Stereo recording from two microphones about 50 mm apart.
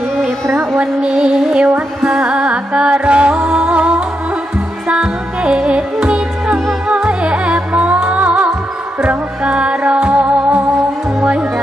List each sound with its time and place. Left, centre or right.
0.7 s music: right